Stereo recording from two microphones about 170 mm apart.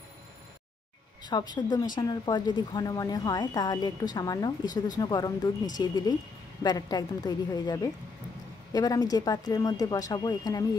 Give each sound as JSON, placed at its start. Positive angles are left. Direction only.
{"t": 1.2, "sound": "speech", "side_deg": 25}